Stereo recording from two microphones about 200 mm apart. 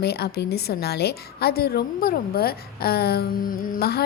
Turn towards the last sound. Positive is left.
turn(degrees=50)  # may be behind; listen again after turning